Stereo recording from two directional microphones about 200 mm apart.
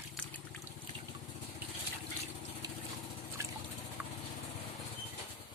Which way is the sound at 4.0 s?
10° right (ahead or behind).